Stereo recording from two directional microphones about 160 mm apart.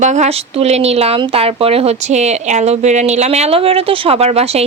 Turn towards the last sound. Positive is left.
turn(degrees=-40)  # may be behind; listen again after turning